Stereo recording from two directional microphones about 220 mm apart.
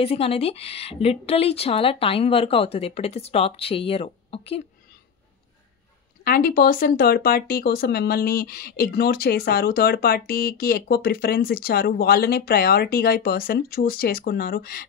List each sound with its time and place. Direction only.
0.0 s a woman's voice: 25° left (ahead or behind)
6.2 s speech: 40° left (ahead or behind)